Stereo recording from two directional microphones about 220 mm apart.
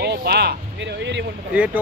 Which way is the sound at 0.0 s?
50° right (ahead or behind).